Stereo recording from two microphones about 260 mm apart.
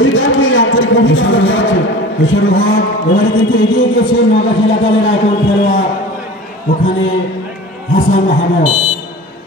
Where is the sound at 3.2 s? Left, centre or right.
Left.